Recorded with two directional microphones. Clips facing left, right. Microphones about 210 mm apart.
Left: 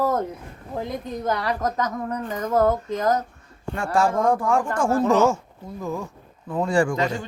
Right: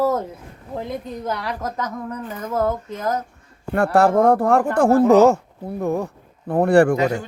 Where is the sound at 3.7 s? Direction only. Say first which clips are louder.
Right 6 dB; 65° right (ahead or behind).